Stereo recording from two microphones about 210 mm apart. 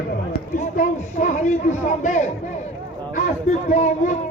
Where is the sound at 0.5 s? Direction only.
40° left (ahead or behind).